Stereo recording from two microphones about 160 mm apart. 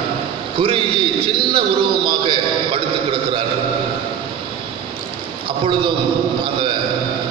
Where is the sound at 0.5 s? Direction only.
35° right (ahead or behind).